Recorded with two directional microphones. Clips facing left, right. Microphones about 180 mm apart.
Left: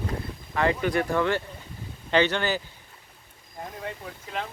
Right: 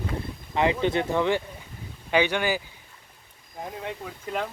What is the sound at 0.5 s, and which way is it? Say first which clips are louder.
Speech: right 1 dB; 20° right (ahead or behind).